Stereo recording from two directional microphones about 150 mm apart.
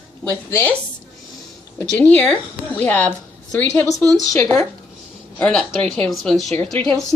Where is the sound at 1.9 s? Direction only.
10° left (ahead or behind).